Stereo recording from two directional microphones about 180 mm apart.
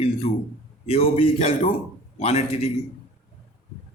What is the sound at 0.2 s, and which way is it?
A man's voice, 35° left (ahead or behind).